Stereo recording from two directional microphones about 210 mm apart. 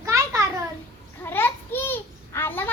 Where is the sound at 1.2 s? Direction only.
10° left (ahead or behind).